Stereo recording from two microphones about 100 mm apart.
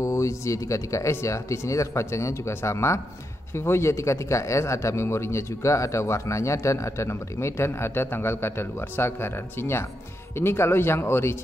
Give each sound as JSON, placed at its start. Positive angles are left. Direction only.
{"t": 0.0, "sound": "speech", "side_deg": 30}